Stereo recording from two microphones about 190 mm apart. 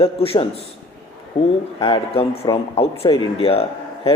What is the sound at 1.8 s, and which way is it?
A man's voice, 30° left (ahead or behind).